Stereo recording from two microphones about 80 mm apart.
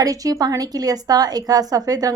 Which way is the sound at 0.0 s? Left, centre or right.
Right.